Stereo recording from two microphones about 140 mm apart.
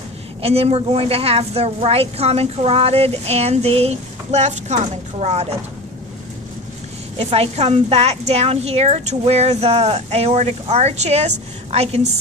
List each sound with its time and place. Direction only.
0.4 s a woman's voice: 45° right (ahead or behind)
7.2 s a woman's voice: 45° right (ahead or behind)